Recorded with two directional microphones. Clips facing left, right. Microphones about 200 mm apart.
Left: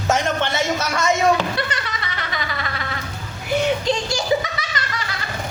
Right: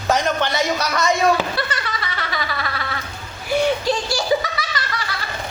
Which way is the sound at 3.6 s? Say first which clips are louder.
Right 1 dB; 20° left (ahead or behind).